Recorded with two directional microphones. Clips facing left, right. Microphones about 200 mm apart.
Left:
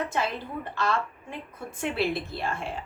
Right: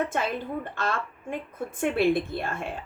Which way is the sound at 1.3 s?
50° right (ahead or behind).